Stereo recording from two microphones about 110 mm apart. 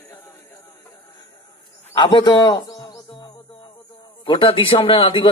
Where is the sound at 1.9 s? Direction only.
45° left (ahead or behind).